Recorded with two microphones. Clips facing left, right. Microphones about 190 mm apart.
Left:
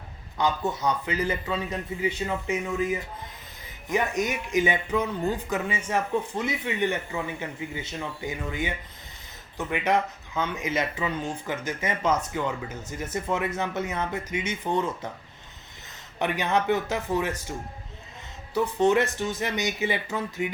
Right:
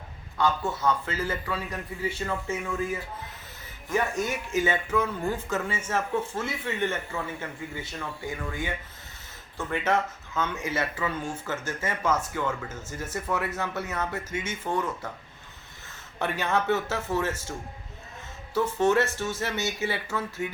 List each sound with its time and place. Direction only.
0.3 s a man's voice: 20° left (ahead or behind)
16.1 s speech: 15° left (ahead or behind)
18.5 s speech: 15° left (ahead or behind)